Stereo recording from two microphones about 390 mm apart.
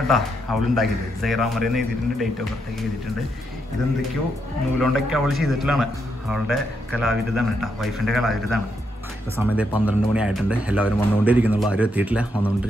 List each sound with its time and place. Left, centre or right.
0.1 s a man's voice: centre
4.7 s a man's voice: centre